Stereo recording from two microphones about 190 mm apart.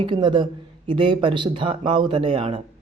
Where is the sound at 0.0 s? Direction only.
25° right (ahead or behind).